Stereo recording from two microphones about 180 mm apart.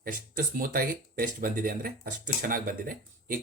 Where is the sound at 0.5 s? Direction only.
50° right (ahead or behind).